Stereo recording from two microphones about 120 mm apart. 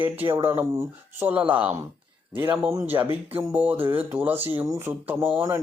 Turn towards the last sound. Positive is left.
turn(degrees=-25)  # may be behind; listen again after turning